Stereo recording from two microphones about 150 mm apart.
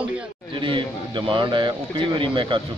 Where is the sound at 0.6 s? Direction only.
35° right (ahead or behind).